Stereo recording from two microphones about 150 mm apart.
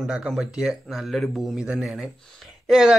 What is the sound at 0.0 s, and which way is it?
A man's voice, 5° right (ahead or behind).